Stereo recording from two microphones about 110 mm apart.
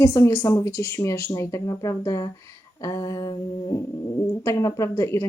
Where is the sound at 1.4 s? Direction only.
30° left (ahead or behind).